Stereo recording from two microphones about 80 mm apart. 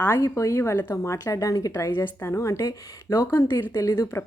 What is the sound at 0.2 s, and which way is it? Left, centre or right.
A woman's voice, left.